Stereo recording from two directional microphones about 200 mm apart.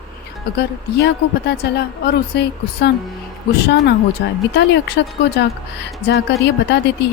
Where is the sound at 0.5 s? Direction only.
55° left (ahead or behind).